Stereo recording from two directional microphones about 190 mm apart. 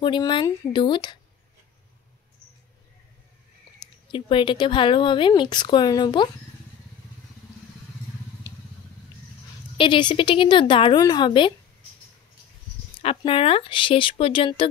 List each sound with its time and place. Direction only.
0.0 s speech: 25° left (ahead or behind)
4.1 s speech: 25° left (ahead or behind)
9.8 s speech: 25° left (ahead or behind)
13.0 s speech: 30° left (ahead or behind)